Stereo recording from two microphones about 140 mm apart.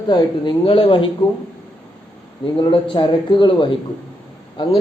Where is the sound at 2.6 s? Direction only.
35° left (ahead or behind).